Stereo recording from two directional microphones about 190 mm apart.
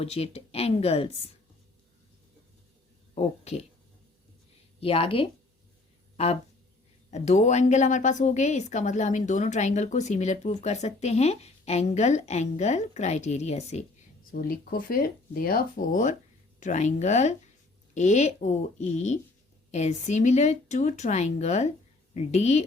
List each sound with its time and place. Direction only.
0.0 s speech: 30° left (ahead or behind)
3.2 s a woman's voice: 35° left (ahead or behind)
4.8 s speech: 30° left (ahead or behind)
7.1 s a woman's voice: 35° left (ahead or behind)
14.3 s a woman's voice: 50° left (ahead or behind)